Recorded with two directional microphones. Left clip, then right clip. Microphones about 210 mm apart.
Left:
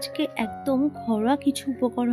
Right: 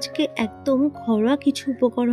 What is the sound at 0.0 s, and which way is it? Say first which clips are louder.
Speech: right 3 dB; 15° right (ahead or behind).